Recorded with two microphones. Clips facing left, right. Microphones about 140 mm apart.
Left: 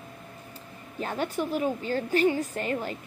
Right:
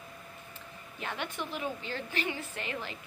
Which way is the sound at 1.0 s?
40° left (ahead or behind).